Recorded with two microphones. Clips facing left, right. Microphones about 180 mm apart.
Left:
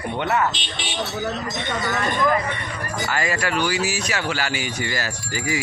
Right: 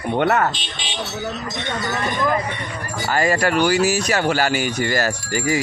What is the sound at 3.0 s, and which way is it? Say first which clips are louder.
Speech: right 7 dB; 40° right (ahead or behind).